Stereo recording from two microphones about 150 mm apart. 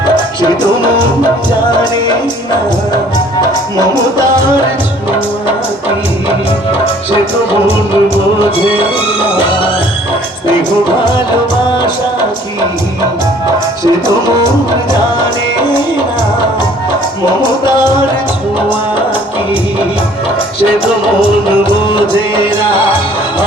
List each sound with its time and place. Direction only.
7.7 s music: 40° left (ahead or behind)
17.7 s music: 30° left (ahead or behind)
21.8 s music: 35° left (ahead or behind)